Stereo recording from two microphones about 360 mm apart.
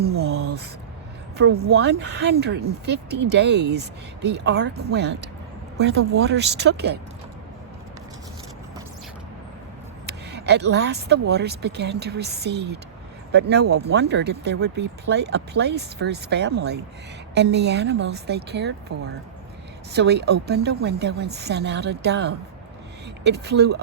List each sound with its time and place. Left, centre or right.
1.4 s speech: right
10.1 s speech: right